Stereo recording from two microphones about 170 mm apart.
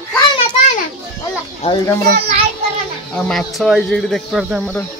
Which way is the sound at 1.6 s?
25° left (ahead or behind).